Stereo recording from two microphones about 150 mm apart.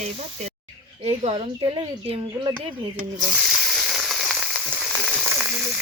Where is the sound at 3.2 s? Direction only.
Centre (ahead or behind).